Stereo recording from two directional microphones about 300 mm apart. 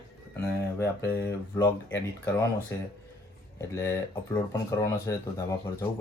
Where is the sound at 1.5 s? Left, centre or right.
Centre.